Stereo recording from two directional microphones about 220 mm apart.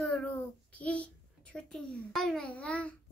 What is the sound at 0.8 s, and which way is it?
A child's voice, 5° left (ahead or behind).